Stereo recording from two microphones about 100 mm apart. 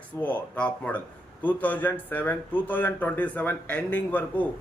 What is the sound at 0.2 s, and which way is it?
A man's voice, 15° left (ahead or behind).